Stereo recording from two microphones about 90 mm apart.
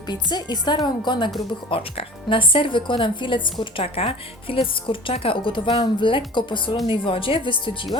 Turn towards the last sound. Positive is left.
turn(degrees=65)  # may be behind; listen again after turning